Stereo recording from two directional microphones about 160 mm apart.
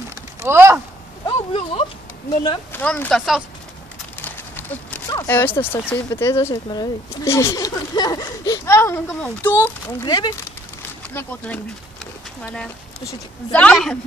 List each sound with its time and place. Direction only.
0.1 s a sound: 15° right (ahead or behind)
1.2 s a sound: 35° left (ahead or behind)
2.7 s speech: 10° left (ahead or behind)
4.2 s horse: 10° left (ahead or behind)
5.1 s speech: 15° left (ahead or behind)
11.1 s speech: 10° left (ahead or behind)